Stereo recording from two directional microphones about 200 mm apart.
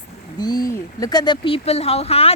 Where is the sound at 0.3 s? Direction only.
20° left (ahead or behind).